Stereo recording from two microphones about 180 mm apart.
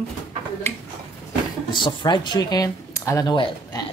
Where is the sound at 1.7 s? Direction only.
25° left (ahead or behind).